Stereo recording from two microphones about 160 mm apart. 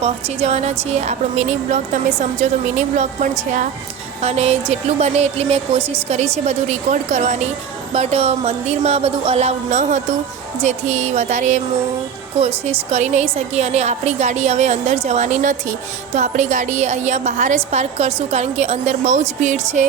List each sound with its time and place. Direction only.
0.0 s a woman's voice: 40° right (ahead or behind)
4.2 s a woman's voice: 40° right (ahead or behind)
12.6 s a woman's voice: 45° right (ahead or behind)